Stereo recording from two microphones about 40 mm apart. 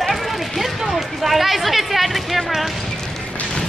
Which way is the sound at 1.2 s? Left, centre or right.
Centre.